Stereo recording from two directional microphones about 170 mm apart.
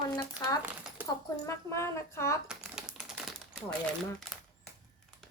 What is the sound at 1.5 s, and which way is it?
Speech, 15° left (ahead or behind).